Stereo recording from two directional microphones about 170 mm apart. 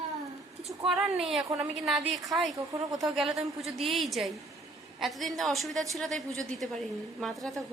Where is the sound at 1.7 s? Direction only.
Centre (ahead or behind).